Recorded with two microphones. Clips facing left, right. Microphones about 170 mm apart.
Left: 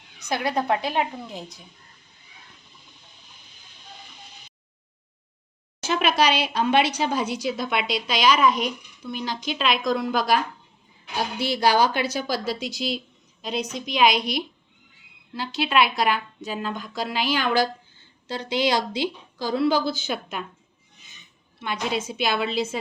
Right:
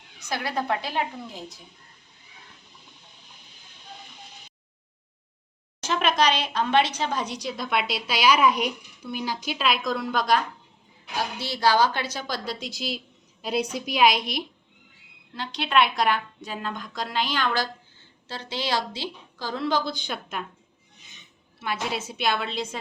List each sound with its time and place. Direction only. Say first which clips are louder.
0.2 s a woman's voice: left 4 dB; 20° left (ahead or behind)
5.8 s a woman's voice: left 1 dB; 5° left (ahead or behind)
21.6 s speech: left 2 dB; 5° right (ahead or behind)